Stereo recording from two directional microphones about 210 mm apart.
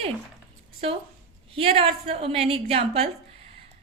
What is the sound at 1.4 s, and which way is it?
A woman's voice, 25° right (ahead or behind).